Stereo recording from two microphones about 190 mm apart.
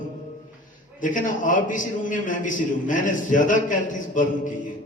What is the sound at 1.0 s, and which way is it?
A man's voice, 45° left (ahead or behind).